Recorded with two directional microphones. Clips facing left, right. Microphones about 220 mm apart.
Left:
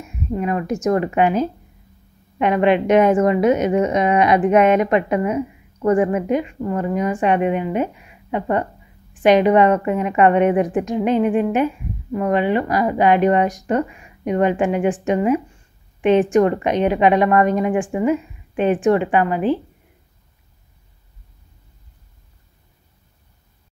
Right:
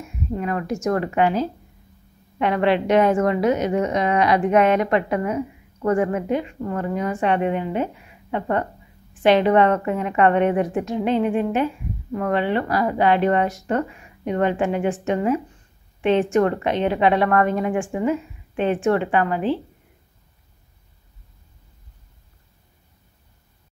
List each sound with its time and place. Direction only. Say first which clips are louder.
0.4 s a woman's voice: left 4 dB; 20° left (ahead or behind)